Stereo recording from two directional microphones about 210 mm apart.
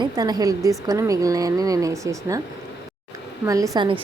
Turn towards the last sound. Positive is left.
turn(degrees=-20)  # may be behind; listen again after turning